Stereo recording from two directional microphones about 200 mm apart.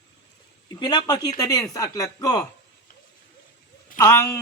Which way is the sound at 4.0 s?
15° left (ahead or behind).